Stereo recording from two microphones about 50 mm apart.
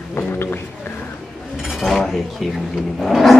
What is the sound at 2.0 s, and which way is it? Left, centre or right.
Speech, centre.